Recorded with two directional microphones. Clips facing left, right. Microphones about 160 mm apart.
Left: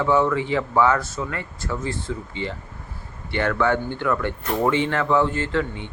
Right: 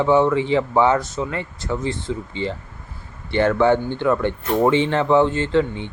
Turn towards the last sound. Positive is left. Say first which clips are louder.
# right 5 dB
turn(degrees=-25)  # may be behind; listen again after turning